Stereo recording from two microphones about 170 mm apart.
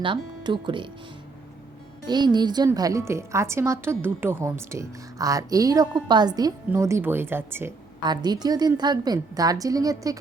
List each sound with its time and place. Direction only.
0.0 s a woman's voice: 30° right (ahead or behind)
2.0 s a woman's voice: 25° right (ahead or behind)
8.0 s a woman's voice: 25° right (ahead or behind)